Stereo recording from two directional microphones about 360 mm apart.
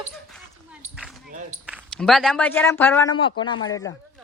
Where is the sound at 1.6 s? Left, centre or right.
Centre.